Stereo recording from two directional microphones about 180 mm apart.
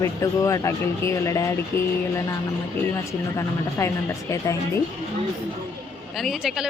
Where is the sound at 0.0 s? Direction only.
15° left (ahead or behind).